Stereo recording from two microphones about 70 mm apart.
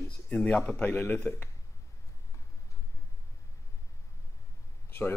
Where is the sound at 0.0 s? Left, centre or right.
Centre.